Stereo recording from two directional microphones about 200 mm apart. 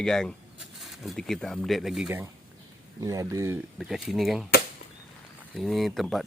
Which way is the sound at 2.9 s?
15° right (ahead or behind).